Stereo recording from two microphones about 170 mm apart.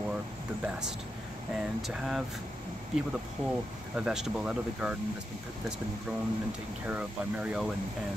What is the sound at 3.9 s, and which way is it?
Speech, 5° right (ahead or behind).